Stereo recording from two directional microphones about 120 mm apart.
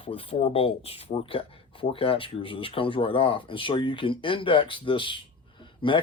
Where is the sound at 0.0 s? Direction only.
50° left (ahead or behind).